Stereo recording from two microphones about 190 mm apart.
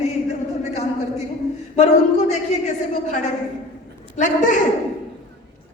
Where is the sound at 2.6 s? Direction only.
40° left (ahead or behind).